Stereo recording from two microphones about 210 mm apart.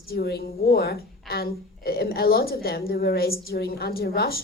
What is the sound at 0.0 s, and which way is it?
A woman's voice, 50° left (ahead or behind).